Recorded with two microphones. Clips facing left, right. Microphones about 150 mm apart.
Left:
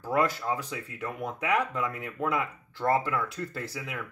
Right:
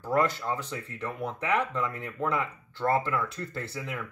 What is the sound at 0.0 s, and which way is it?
Speech, 5° left (ahead or behind).